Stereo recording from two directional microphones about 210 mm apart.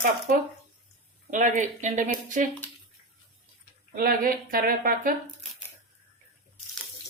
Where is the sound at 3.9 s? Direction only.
45° right (ahead or behind).